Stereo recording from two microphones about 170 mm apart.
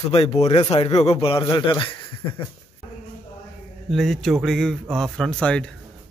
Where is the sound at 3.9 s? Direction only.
Centre (ahead or behind).